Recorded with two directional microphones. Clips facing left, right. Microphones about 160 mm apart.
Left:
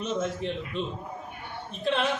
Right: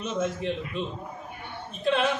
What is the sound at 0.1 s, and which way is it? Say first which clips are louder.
Speech: right 2 dB; 5° right (ahead or behind).